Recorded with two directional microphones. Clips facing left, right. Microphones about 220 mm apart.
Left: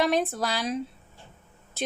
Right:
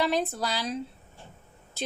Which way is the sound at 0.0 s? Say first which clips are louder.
Left 2 dB; 55° left (ahead or behind).